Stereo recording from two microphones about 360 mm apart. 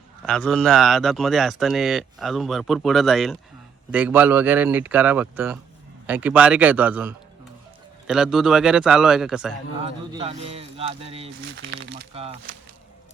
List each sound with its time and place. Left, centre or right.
0.3 s speech: centre
9.8 s speech: centre
11.4 s speech: right
12.1 s speech: centre